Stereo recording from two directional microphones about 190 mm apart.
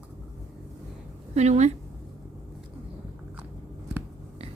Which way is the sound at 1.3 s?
35° right (ahead or behind).